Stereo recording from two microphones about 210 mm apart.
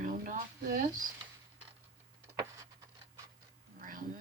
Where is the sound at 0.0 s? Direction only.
40° right (ahead or behind).